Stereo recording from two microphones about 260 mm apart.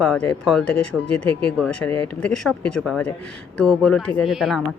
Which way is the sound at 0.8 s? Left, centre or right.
Left.